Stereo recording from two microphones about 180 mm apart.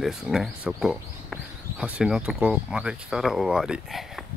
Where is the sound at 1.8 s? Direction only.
5° right (ahead or behind).